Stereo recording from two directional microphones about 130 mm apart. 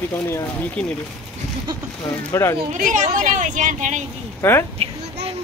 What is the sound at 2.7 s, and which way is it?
Speech, 70° right (ahead or behind).